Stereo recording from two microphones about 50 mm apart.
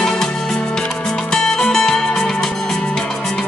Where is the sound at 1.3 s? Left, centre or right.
Centre.